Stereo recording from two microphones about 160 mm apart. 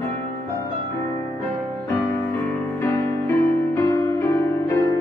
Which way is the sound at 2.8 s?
15° left (ahead or behind).